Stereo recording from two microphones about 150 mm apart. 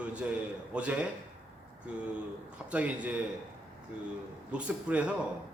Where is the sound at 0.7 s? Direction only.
10° right (ahead or behind).